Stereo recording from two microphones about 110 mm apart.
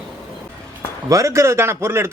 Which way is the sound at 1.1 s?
30° right (ahead or behind).